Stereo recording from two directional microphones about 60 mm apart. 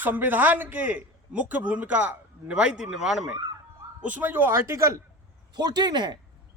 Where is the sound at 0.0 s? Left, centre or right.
Right; by 3.2 s centre.